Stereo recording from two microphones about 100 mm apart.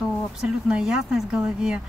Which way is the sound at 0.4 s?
5° right (ahead or behind).